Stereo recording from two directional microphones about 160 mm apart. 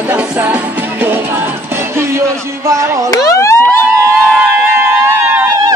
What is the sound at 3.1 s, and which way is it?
Emergency vehicle, 20° left (ahead or behind).